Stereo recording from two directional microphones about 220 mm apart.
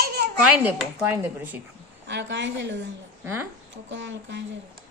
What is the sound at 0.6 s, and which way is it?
Speech, 10° right (ahead or behind).